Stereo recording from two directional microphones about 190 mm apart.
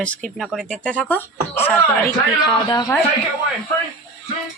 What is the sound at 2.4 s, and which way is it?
Speech, 20° left (ahead or behind).